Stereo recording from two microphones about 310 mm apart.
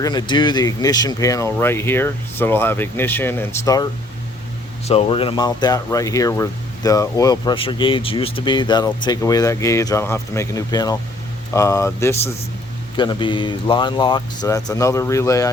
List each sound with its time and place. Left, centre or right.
0.0 s speech: centre
4.9 s speech: centre